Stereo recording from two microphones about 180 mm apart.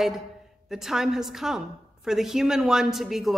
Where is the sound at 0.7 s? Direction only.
Centre (ahead or behind).